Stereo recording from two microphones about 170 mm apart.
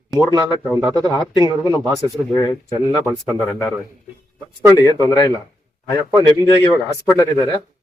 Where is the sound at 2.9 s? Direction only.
5° left (ahead or behind).